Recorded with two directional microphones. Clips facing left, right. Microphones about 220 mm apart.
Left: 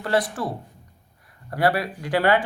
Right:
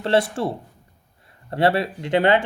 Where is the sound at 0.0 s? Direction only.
25° right (ahead or behind).